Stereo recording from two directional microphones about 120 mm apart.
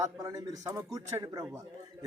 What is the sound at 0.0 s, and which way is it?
A man's voice, 30° right (ahead or behind).